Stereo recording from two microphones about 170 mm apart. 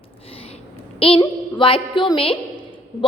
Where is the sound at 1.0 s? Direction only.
30° left (ahead or behind).